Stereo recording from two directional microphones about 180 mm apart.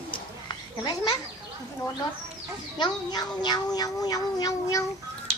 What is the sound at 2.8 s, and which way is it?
Cat, 25° left (ahead or behind).